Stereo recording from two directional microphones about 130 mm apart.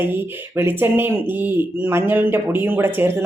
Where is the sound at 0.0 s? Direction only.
15° right (ahead or behind).